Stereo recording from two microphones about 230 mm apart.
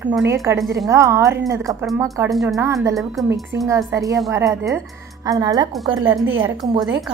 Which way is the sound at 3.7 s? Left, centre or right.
Centre.